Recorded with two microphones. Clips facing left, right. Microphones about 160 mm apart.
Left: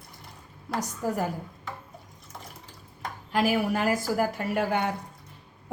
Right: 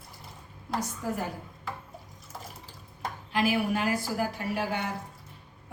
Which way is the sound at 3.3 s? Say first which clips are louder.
Left 2 dB; 45° left (ahead or behind).